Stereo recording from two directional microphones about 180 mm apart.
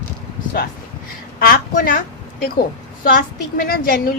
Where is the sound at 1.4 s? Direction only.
55° left (ahead or behind).